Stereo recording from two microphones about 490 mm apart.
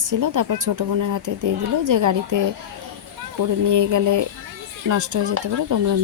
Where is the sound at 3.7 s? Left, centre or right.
Right.